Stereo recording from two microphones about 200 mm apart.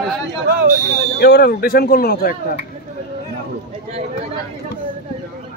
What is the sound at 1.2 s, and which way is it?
Speech, 50° left (ahead or behind).